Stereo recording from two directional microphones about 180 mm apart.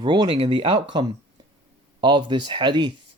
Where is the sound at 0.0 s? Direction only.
25° right (ahead or behind).